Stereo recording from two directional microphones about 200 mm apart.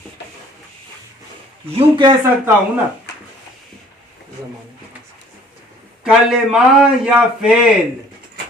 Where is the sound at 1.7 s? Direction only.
20° right (ahead or behind).